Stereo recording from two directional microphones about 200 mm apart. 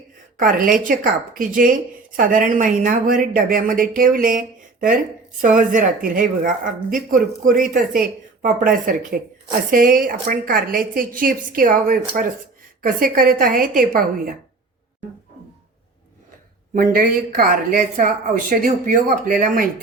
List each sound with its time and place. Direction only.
0.3 s speech: 40° right (ahead or behind)
16.7 s speech: 45° right (ahead or behind)